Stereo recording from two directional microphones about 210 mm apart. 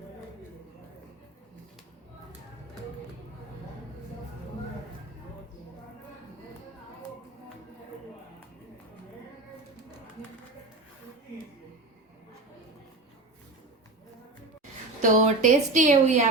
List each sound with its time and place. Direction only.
15.0 s a woman's voice: 35° right (ahead or behind)